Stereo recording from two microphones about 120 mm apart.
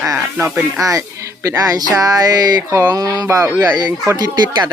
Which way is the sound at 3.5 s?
15° right (ahead or behind).